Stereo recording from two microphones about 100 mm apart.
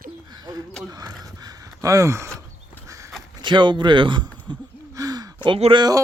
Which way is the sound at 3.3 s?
50° right (ahead or behind).